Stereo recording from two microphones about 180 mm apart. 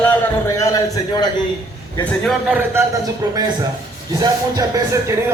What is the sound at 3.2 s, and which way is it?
A man's voice, 25° right (ahead or behind).